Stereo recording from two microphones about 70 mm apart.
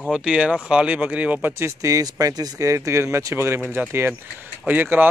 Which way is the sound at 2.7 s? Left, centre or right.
Right.